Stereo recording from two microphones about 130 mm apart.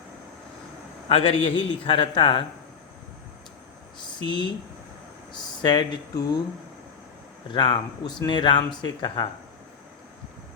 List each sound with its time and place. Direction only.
1.0 s a man's voice: 50° left (ahead or behind)
4.0 s speech: 35° left (ahead or behind)
5.6 s a man's voice: 35° left (ahead or behind)
7.5 s a man's voice: 35° left (ahead or behind)